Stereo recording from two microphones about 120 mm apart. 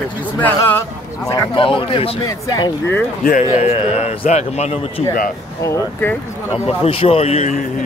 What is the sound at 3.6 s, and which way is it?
A man's voice, 60° left (ahead or behind).